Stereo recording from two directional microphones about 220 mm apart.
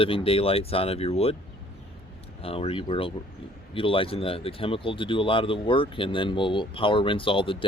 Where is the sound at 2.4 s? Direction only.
25° left (ahead or behind).